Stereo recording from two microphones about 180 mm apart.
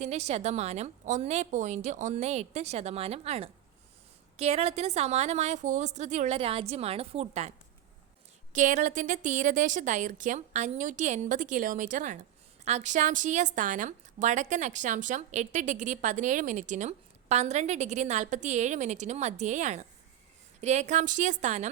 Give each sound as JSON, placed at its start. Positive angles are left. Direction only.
{"t": 0.0, "sound": "a woman's voice", "side_deg": -35}
{"t": 8.5, "sound": "a woman's voice", "side_deg": -45}